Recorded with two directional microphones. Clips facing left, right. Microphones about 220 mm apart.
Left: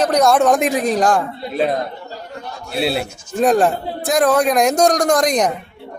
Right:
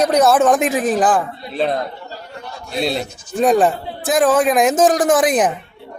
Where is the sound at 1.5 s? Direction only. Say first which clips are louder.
Left 1 dB; 10° left (ahead or behind).